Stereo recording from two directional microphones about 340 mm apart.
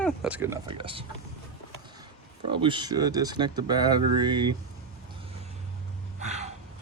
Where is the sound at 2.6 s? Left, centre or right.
Centre.